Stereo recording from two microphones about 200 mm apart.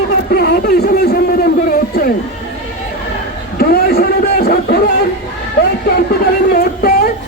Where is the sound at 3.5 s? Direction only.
50° left (ahead or behind).